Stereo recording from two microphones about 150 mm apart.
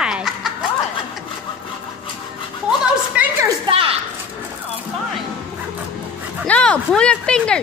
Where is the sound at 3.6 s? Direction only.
40° right (ahead or behind).